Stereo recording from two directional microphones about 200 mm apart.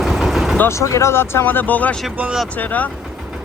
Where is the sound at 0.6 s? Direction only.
15° left (ahead or behind); by 2.4 s centre (ahead or behind).